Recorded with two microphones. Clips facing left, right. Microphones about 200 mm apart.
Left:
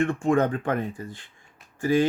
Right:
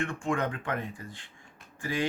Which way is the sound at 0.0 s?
40° left (ahead or behind).